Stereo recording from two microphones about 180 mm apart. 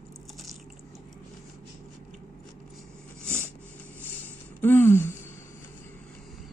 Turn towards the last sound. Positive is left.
turn(degrees=10)  # may be behind; listen again after turning